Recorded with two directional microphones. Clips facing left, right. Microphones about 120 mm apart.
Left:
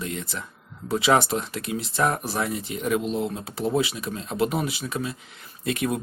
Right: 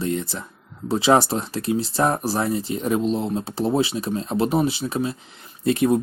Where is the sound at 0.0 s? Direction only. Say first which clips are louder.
Right 7 dB; 30° right (ahead or behind).